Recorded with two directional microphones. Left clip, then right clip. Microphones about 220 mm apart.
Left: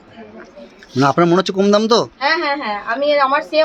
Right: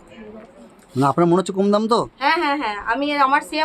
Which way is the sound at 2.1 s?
30° right (ahead or behind).